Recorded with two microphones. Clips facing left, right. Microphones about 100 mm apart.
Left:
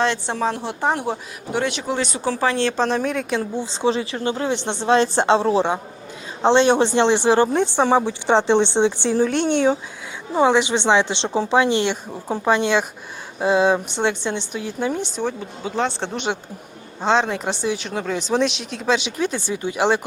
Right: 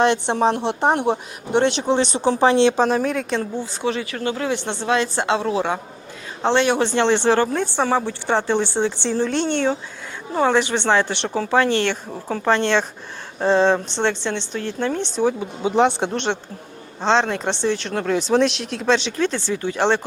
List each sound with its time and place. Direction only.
0.0 s speech: 20° right (ahead or behind)
2.8 s speech: centre (ahead or behind)
3.6 s speech: 25° left (ahead or behind); by 15.2 s 10° left (ahead or behind)
15.2 s speech: 5° right (ahead or behind)
15.6 s speech: 20° right (ahead or behind)
16.1 s speech: 5° left (ahead or behind)